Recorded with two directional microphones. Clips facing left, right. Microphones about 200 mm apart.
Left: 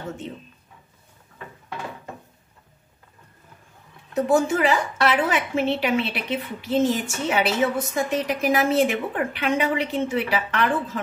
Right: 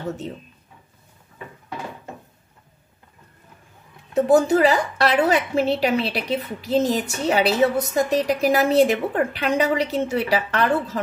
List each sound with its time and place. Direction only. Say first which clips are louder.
4.1 s a woman's voice: right 4 dB; 35° right (ahead or behind)